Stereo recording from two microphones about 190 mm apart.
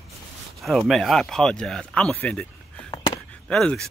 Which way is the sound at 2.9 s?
20° left (ahead or behind).